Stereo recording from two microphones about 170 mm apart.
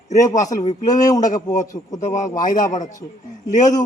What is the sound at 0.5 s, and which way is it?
Speech, 45° left (ahead or behind).